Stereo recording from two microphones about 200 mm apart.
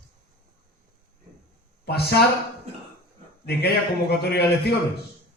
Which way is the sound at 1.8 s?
55° left (ahead or behind).